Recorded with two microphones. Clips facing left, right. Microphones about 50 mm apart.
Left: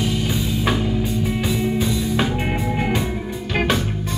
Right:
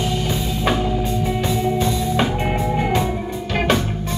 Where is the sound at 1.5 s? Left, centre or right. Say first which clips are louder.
Right 2 dB; centre.